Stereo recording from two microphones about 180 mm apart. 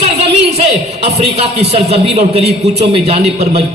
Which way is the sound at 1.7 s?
35° right (ahead or behind).